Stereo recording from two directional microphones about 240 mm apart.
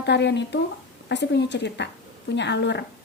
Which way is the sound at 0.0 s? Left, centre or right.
Left.